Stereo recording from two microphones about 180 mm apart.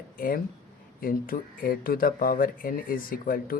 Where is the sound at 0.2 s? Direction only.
50° left (ahead or behind).